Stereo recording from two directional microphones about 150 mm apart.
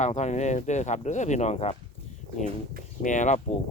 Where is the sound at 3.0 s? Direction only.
55° left (ahead or behind).